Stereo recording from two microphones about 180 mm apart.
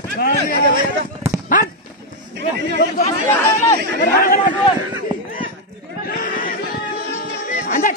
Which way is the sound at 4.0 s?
45° left (ahead or behind).